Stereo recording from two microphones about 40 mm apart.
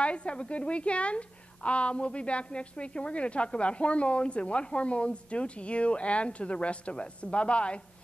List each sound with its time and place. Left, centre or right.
0.0 s a woman's voice: left